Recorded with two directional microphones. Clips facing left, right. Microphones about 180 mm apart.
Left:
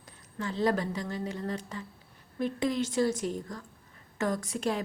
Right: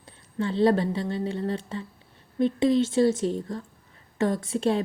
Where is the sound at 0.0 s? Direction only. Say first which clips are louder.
Right 7 dB; 30° right (ahead or behind).